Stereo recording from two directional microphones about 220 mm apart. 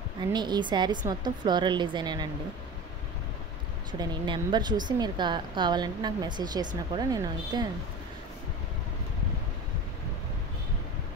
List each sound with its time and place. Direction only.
0.2 s a woman's voice: 20° right (ahead or behind)
4.0 s a woman's voice: 20° right (ahead or behind)